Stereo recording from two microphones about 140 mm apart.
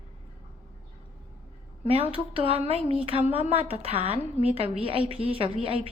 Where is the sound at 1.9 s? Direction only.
40° right (ahead or behind).